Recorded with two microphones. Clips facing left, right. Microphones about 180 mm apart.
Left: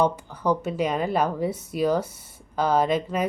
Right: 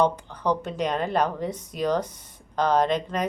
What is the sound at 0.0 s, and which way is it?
Speech, 5° left (ahead or behind).